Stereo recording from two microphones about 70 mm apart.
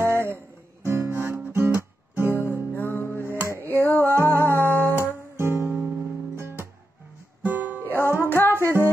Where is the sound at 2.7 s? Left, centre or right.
Left.